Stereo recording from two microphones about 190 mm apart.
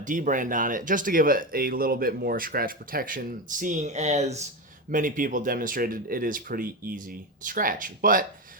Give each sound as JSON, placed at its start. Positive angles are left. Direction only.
{"t": 0.0, "sound": "speech", "side_deg": -45}